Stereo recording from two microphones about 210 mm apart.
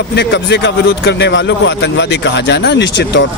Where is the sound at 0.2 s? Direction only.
55° left (ahead or behind).